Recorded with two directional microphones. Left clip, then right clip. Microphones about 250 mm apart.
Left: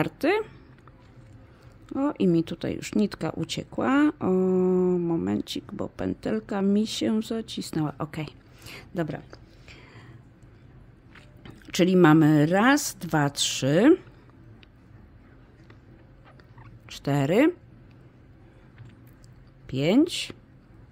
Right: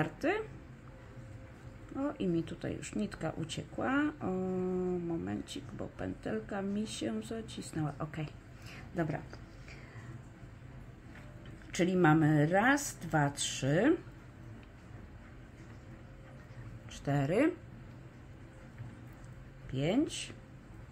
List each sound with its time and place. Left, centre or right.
0.0 s speech: left
2.0 s speech: left
11.4 s speech: left
16.9 s speech: left
19.7 s speech: left